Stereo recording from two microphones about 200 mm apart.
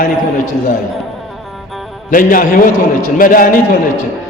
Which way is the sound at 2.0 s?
45° left (ahead or behind).